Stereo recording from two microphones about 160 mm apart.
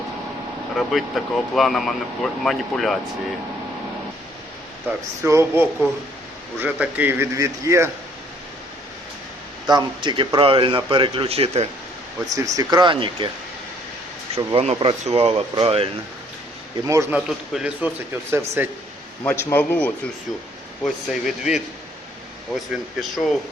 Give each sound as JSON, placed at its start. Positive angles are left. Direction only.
{"t": 0.8, "sound": "speech", "side_deg": 0}
{"t": 4.9, "sound": "speech", "side_deg": -10}
{"t": 9.6, "sound": "speech", "side_deg": -25}
{"t": 12.2, "sound": "speech", "side_deg": -20}
{"t": 14.5, "sound": "speech", "side_deg": -40}
{"t": 16.8, "sound": "speech", "side_deg": -20}
{"t": 19.2, "sound": "a man's voice", "side_deg": 15}
{"t": 20.8, "sound": "speech", "side_deg": -5}